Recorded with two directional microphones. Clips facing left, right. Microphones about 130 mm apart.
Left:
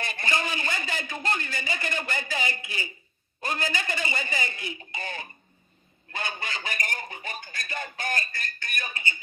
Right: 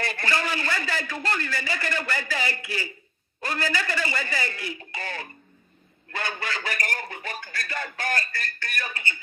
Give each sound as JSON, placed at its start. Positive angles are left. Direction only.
{"t": 0.0, "sound": "a man's voice", "side_deg": 20}